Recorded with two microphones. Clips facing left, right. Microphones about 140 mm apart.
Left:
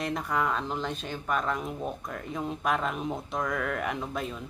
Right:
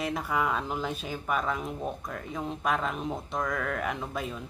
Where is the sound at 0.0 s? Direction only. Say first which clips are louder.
Even; 5° right (ahead or behind).